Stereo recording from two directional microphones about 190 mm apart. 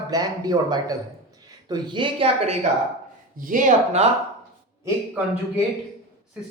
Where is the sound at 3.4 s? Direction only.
45° right (ahead or behind).